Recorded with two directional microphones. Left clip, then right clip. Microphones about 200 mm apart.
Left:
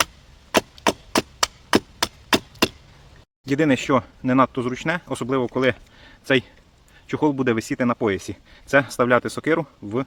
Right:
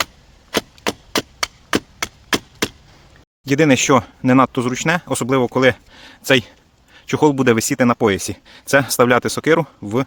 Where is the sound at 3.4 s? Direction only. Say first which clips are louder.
Right 6 dB; 50° right (ahead or behind).